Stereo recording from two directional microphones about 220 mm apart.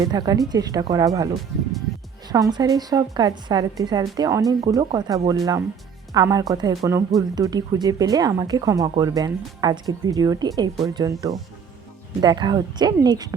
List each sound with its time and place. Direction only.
0.0 s a woman's voice: 15° right (ahead or behind)